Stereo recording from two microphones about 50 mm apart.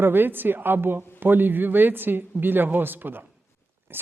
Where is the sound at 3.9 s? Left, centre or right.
Right.